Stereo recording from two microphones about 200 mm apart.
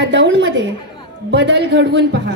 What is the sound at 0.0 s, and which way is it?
A woman's voice, 60° right (ahead or behind).